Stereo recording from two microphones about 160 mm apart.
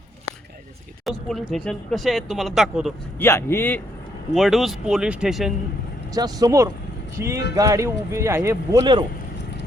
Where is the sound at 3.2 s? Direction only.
15° left (ahead or behind).